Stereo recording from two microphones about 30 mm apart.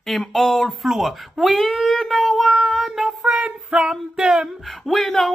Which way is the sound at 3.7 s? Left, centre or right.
Right.